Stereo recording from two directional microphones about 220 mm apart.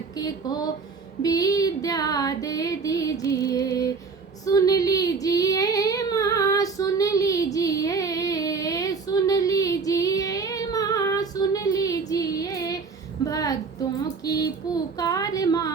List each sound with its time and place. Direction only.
1.2 s female singing: 15° left (ahead or behind)
4.4 s child singing: 15° left (ahead or behind)
13.2 s a sound: 15° left (ahead or behind)
14.3 s child singing: 15° left (ahead or behind)